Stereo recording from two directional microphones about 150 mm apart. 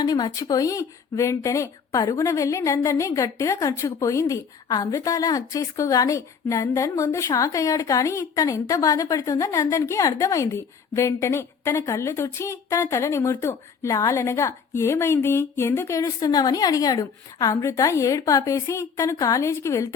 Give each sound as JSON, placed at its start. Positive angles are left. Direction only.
{"t": 0.0, "sound": "speech", "side_deg": 25}